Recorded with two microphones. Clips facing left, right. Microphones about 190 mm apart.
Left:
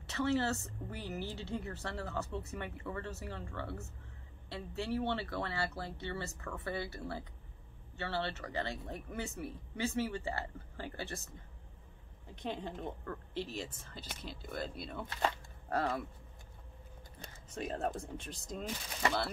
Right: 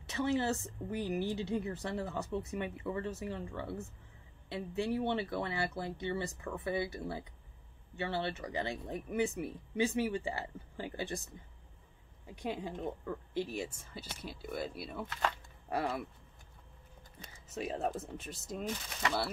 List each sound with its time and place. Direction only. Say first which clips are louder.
0.0 s a woman's voice: even; 15° right (ahead or behind)
12.3 s a woman's voice: right 2 dB; 10° right (ahead or behind)
17.5 s speech: right 1 dB; 5° right (ahead or behind)